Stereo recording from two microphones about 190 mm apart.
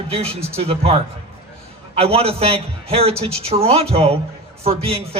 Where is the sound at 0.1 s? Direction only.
30° right (ahead or behind).